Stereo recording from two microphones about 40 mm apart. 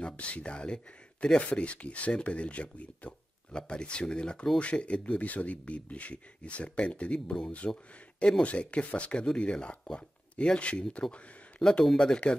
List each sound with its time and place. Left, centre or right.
0.0 s speech: left
11.6 s speech: centre
12.2 s speech: left